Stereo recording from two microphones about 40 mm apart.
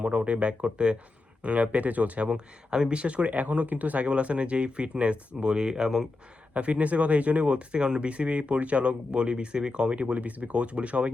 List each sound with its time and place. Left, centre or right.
0.0 s speech: right
1.5 s speech: right
2.3 s speech: right
6.5 s speech: right
9.9 s speech: right